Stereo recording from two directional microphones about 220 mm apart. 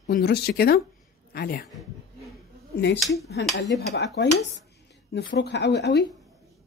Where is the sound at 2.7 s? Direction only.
50° left (ahead or behind).